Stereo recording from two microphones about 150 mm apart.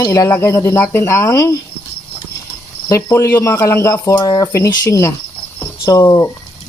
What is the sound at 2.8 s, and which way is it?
Speech, 20° left (ahead or behind).